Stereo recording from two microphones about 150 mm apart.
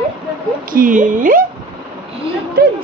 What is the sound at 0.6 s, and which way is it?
Speech, 65° right (ahead or behind).